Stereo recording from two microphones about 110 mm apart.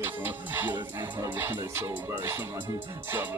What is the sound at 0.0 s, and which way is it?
Music, 20° right (ahead or behind).